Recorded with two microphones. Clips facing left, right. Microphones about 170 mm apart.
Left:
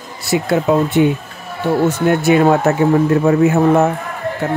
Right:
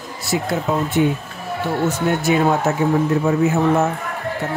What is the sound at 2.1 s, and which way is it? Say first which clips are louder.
Speech: left 6 dB; 65° left (ahead or behind).